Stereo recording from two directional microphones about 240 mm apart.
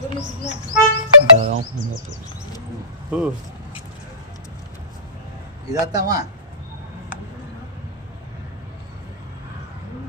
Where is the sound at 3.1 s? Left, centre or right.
Centre.